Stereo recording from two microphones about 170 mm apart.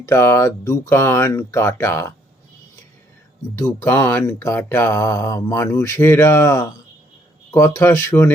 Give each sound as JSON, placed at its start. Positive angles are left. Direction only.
{"t": 0.0, "sound": "speech", "side_deg": 15}
{"t": 3.5, "sound": "speech", "side_deg": 15}